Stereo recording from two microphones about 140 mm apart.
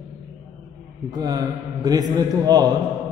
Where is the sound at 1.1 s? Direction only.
25° right (ahead or behind).